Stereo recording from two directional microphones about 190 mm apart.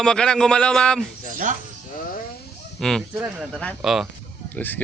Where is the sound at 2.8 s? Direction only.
5° left (ahead or behind).